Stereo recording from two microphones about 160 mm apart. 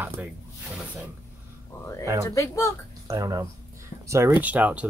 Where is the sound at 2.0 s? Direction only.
20° right (ahead or behind).